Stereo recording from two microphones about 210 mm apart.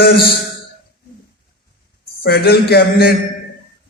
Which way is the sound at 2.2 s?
50° left (ahead or behind).